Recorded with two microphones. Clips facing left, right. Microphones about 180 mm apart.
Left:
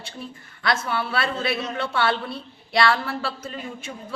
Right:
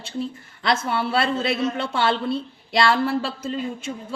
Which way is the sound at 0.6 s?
25° right (ahead or behind).